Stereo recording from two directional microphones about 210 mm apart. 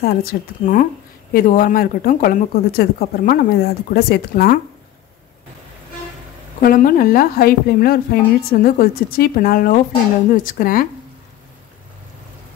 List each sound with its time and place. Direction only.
0.0 s a woman's voice: 45° left (ahead or behind)
6.6 s a woman's voice: 40° left (ahead or behind)